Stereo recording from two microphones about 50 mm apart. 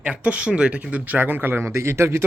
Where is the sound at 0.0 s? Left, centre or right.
Right.